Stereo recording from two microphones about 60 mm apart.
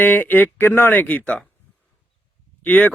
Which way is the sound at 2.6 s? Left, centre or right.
Left.